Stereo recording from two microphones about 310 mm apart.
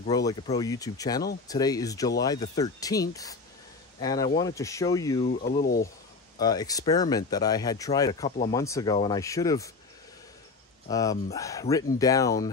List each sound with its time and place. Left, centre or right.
0.3 s speech: centre
4.4 s speech: centre
5.4 s speech: left
6.3 s speech: centre
10.9 s speech: centre